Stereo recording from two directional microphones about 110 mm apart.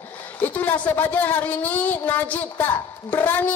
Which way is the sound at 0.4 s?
15° left (ahead or behind).